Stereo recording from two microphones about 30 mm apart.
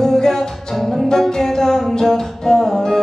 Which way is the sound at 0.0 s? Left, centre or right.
Centre.